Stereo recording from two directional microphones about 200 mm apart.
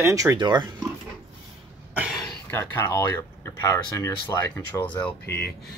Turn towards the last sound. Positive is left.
turn(degrees=55)  # may be behind; listen again after turning